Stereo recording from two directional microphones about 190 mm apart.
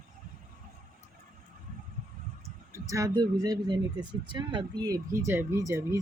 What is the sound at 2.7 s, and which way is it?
Speech, 15° right (ahead or behind).